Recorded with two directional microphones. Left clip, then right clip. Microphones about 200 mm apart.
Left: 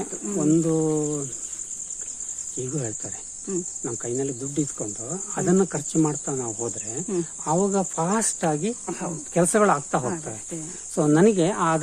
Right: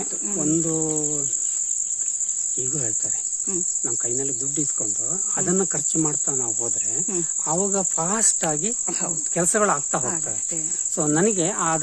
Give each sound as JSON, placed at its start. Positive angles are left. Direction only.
{"t": 0.3, "sound": "cricket", "side_deg": -5}
{"t": 2.6, "sound": "cricket", "side_deg": -5}
{"t": 8.9, "sound": "cricket", "side_deg": -60}
{"t": 9.3, "sound": "cricket", "side_deg": 0}